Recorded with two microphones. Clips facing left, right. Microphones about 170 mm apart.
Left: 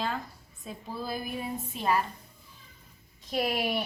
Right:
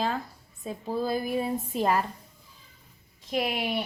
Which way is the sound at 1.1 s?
25° right (ahead or behind).